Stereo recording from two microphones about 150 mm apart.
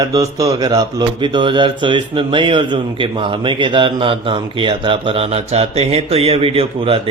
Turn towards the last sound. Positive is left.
turn(degrees=-40)  # may be behind; listen again after turning